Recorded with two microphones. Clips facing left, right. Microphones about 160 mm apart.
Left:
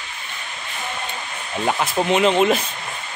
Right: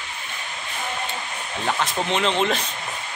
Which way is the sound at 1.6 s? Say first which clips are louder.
Left 4 dB; 10° left (ahead or behind).